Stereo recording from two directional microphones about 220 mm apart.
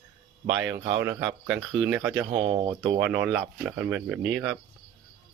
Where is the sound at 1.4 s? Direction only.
Centre (ahead or behind).